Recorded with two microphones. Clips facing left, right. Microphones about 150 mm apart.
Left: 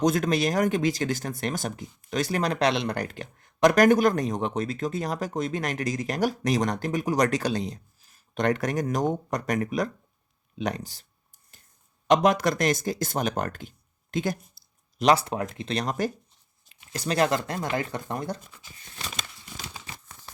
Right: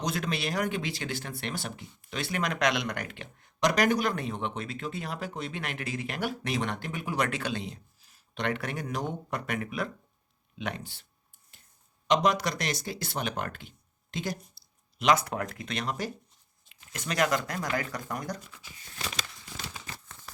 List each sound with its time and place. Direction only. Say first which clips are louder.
0.0 s speech: left 9 dB; 45° left (ahead or behind)
12.0 s speech: left 5 dB; 50° left (ahead or behind)
15.0 s speech: left 4 dB; 30° left (ahead or behind); by 16.1 s 45° left (ahead or behind)
16.6 s speech: left 6 dB; 35° left (ahead or behind)